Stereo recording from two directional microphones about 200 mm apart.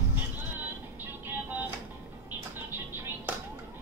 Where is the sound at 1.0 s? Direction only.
10° right (ahead or behind).